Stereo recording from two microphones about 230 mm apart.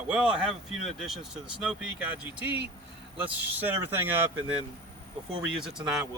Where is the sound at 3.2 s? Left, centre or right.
Centre.